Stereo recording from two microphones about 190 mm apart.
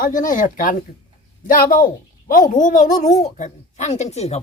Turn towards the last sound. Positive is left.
turn(degrees=35)  # may be behind; listen again after turning